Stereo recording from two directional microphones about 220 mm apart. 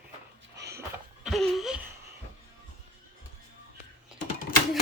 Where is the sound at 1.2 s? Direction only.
Centre (ahead or behind).